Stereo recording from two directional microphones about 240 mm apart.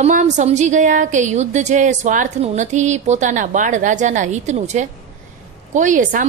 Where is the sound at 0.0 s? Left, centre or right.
Right.